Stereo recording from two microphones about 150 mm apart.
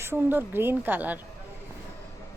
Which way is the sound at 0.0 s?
15° right (ahead or behind).